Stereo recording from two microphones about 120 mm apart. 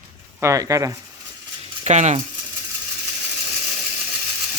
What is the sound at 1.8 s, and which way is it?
Speech, 75° right (ahead or behind).